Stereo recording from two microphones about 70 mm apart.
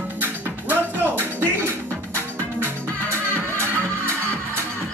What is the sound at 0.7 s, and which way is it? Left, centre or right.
Music, right.